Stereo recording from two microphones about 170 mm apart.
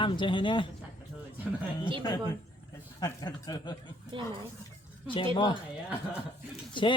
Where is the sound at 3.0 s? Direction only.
20° left (ahead or behind).